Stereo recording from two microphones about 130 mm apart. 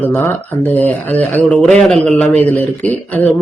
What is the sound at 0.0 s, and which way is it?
A man's voice, 15° left (ahead or behind).